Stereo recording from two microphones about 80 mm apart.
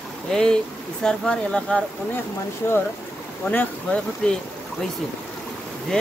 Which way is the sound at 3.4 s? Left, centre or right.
Centre.